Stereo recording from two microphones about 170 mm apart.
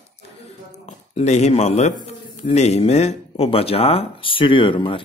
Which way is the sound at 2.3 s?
40° left (ahead or behind).